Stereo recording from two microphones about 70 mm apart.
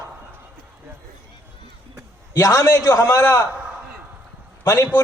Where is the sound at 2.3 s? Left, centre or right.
Left.